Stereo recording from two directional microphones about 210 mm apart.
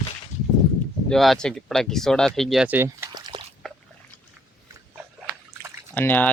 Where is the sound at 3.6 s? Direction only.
Centre (ahead or behind).